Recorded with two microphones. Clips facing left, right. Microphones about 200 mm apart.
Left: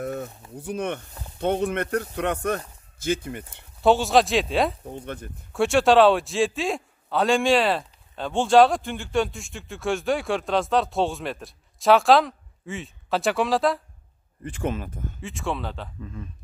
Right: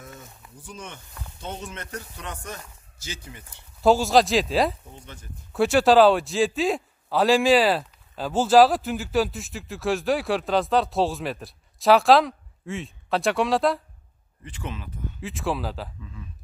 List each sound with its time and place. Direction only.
0.0 s a sound: 65° left (ahead or behind)
0.6 s speech: 60° left (ahead or behind)
3.8 s a man's voice: centre (ahead or behind)
4.9 s speech: 60° left (ahead or behind)
5.5 s a man's voice: centre (ahead or behind)
14.4 s speech: 50° left (ahead or behind)
15.1 s a man's voice: centre (ahead or behind)
16.0 s speech: 50° left (ahead or behind)